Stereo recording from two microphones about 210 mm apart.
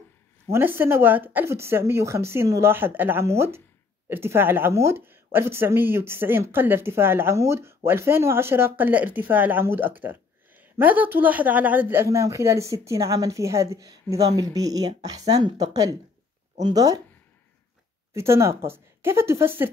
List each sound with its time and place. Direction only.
0.5 s speech: 10° right (ahead or behind)
18.1 s speech: 15° right (ahead or behind)